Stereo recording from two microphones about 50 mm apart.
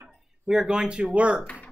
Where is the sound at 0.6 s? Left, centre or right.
Centre.